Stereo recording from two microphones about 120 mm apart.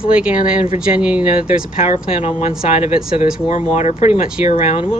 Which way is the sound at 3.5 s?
80° left.